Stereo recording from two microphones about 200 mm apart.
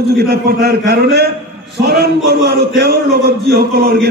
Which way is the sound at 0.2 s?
50° right (ahead or behind).